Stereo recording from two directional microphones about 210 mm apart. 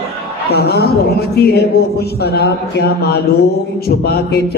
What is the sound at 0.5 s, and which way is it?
A man's voice, 50° left (ahead or behind).